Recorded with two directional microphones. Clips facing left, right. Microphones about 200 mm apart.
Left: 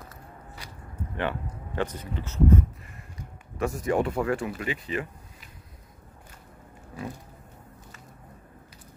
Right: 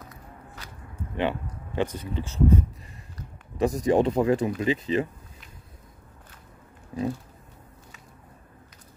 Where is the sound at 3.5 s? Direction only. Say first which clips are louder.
Right 4 dB; 15° right (ahead or behind).